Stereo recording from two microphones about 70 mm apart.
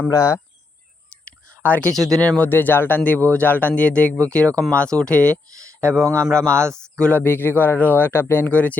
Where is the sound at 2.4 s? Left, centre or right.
Left.